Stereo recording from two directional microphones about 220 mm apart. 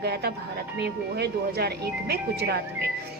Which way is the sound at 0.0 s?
45° right (ahead or behind).